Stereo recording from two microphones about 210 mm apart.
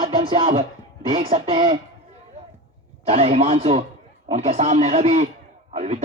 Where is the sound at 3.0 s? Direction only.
30° right (ahead or behind).